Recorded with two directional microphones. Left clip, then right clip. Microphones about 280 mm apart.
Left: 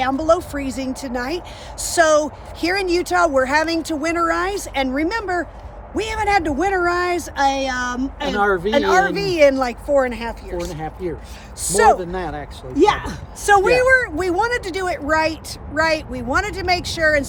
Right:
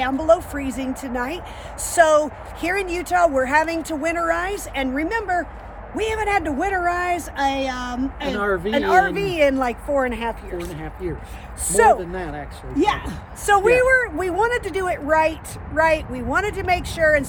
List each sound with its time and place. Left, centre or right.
0.0 s speech: centre
8.8 s speech: centre
10.7 s speech: centre
11.7 s speech: centre
11.9 s speech: centre
13.4 s speech: centre